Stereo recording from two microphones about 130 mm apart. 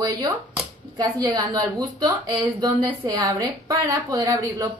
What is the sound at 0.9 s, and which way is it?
A woman's voice, 30° right (ahead or behind).